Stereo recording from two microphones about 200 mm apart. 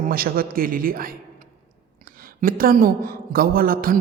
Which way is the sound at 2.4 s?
45° right (ahead or behind).